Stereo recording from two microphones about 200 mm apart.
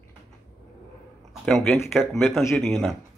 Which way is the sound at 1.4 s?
Centre (ahead or behind).